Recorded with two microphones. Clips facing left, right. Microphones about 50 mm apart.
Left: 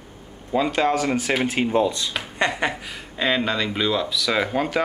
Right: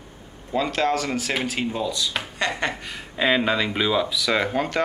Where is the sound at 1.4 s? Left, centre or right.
Left.